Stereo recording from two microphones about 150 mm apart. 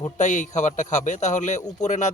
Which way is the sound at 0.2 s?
55° left (ahead or behind).